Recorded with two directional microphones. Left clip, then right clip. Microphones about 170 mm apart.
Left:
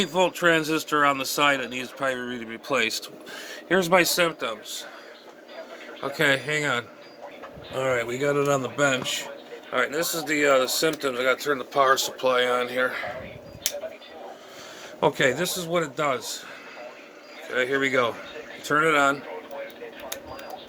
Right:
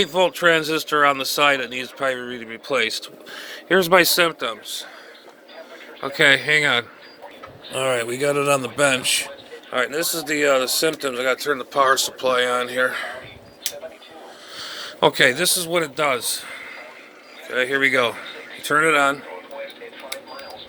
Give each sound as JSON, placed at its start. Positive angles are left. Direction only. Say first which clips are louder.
{"t": 0.0, "sound": "speech", "louder": "right 4 dB", "side_deg": -5}
{"t": 3.7, "sound": "speech", "louder": "right 5 dB", "side_deg": -20}
{"t": 3.9, "sound": "speech", "louder": "right 5 dB", "side_deg": -30}
{"t": 6.0, "sound": "a man's voice", "louder": "right 7 dB", "side_deg": -20}
{"t": 14.8, "sound": "a man's voice", "louder": "right 6 dB", "side_deg": -15}